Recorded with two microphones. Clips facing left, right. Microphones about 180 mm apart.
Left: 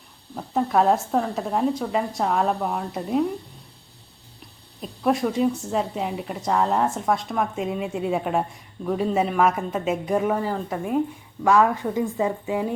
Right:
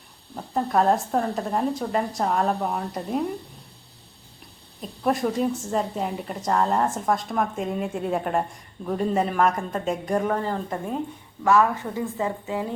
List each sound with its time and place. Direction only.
0.3 s a woman's voice: centre (ahead or behind)
4.8 s a woman's voice: centre (ahead or behind); by 12.7 s 15° left (ahead or behind)